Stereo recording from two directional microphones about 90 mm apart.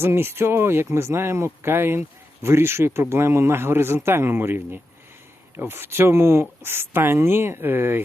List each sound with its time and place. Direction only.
0.0 s speech: 25° right (ahead or behind)